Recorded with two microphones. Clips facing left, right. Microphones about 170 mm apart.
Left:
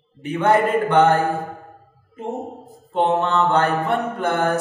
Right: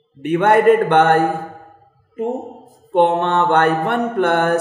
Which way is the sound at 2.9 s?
65° right (ahead or behind).